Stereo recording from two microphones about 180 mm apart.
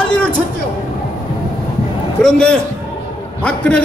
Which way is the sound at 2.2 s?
5° left (ahead or behind).